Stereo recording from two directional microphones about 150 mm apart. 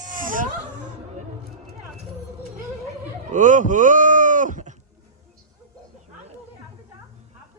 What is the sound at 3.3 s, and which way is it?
Speech, 55° right (ahead or behind).